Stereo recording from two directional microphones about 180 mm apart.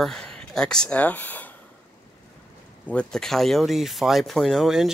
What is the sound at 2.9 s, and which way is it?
Speech, 5° left (ahead or behind).